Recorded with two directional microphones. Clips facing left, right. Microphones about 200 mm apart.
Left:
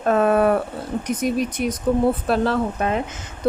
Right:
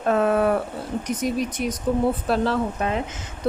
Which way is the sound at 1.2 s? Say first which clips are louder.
Left 3 dB; 55° left (ahead or behind).